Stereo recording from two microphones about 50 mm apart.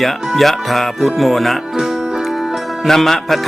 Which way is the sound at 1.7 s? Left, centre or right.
Centre.